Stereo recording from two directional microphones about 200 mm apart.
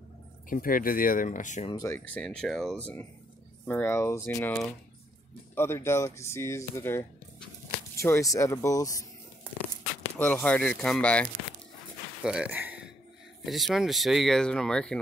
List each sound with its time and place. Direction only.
0.5 s speech: 45° left (ahead or behind)
1.7 s speech: 15° left (ahead or behind)
10.1 s speech: 5° left (ahead or behind)
12.2 s speech: 5° right (ahead or behind)